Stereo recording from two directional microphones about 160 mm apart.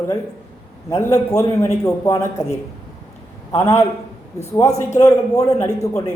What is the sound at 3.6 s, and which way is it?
Speech, 15° left (ahead or behind).